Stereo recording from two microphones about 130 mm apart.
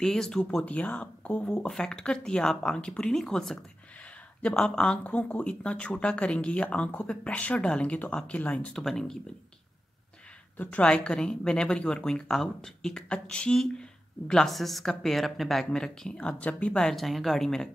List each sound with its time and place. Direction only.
0.0 s speech: 5° left (ahead or behind)
10.6 s speech: 10° left (ahead or behind)